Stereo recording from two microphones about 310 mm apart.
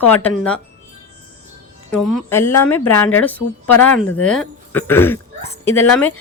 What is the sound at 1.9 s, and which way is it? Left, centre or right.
Speech, centre.